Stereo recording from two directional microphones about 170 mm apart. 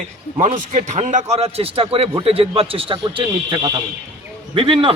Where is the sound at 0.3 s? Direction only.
45° right (ahead or behind).